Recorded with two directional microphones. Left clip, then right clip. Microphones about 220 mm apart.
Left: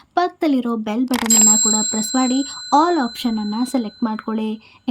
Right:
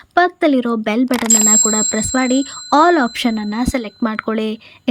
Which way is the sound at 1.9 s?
5° right (ahead or behind).